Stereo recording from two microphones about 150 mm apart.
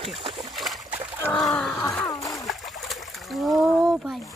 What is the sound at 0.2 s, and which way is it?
Boat, 35° right (ahead or behind).